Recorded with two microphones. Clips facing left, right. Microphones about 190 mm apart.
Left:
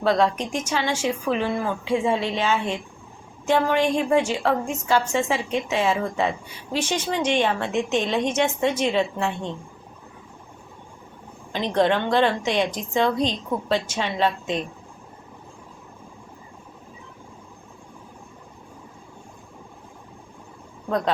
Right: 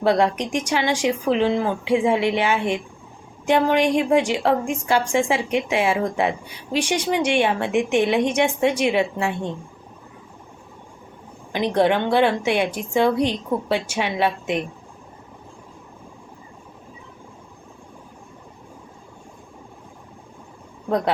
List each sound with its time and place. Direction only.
0.0 s a woman's voice: 15° right (ahead or behind)
11.5 s a woman's voice: 15° right (ahead or behind)